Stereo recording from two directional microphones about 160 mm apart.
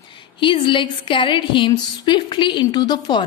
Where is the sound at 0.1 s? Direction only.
30° left (ahead or behind).